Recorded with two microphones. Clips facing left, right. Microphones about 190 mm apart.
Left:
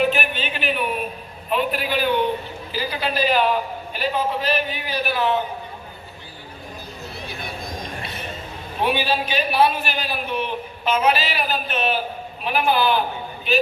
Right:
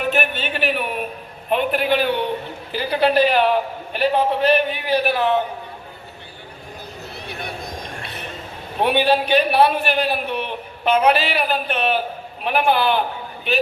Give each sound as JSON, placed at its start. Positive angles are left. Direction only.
{"t": 0.0, "sound": "a sound", "side_deg": -50}
{"t": 1.5, "sound": "a man's voice", "side_deg": -55}
{"t": 8.8, "sound": "a man's voice", "side_deg": -60}